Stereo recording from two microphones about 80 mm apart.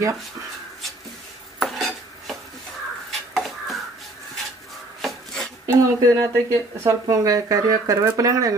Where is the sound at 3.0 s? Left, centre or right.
Centre.